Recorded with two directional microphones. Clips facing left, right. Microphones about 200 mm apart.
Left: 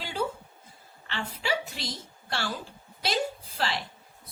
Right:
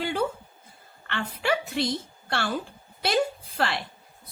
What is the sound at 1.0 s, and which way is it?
Speech, 55° right (ahead or behind).